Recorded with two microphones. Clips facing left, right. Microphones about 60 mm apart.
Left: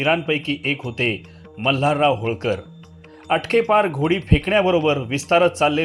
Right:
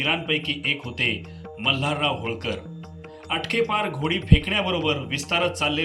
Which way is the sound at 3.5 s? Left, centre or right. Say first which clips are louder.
Left 7 dB; left.